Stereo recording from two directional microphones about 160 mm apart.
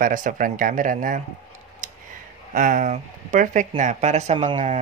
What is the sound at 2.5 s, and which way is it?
Speech, 55° right (ahead or behind).